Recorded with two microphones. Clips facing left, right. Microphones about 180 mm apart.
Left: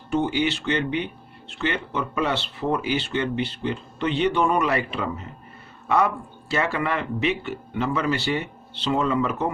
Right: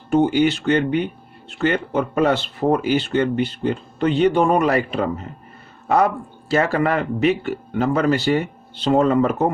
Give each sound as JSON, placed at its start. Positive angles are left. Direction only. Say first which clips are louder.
{"t": 0.1, "sound": "speech", "louder": "right 7 dB", "side_deg": -45}
{"t": 6.5, "sound": "speech", "louder": "right 6 dB", "side_deg": -40}